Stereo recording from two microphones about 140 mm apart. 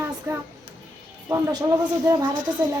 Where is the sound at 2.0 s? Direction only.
25° right (ahead or behind).